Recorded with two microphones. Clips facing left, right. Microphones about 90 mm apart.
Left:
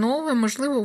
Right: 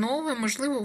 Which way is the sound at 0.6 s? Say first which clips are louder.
Left 4 dB; 25° left (ahead or behind).